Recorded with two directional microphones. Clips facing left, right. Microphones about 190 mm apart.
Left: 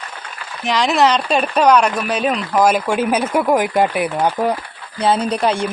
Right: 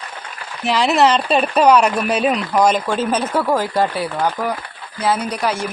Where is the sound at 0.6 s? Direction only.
5° right (ahead or behind).